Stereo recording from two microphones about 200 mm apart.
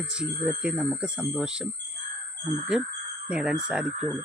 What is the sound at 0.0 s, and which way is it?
Speech, 5° right (ahead or behind).